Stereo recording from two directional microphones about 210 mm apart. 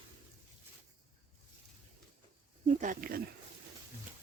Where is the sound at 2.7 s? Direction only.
40° right (ahead or behind).